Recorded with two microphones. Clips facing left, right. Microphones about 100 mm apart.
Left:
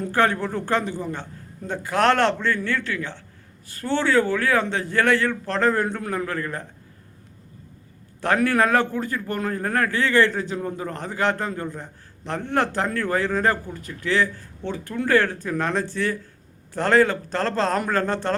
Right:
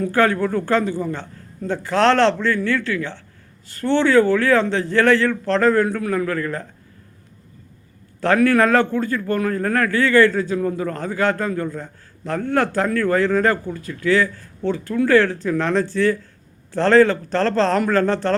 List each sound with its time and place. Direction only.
0.1 s a man's voice: 20° left (ahead or behind)
8.2 s a man's voice: 20° left (ahead or behind)